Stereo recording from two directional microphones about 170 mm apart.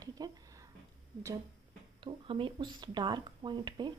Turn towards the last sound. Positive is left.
turn(degrees=-25)  # may be behind; listen again after turning